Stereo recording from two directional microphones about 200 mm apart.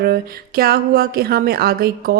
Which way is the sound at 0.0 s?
50° right (ahead or behind).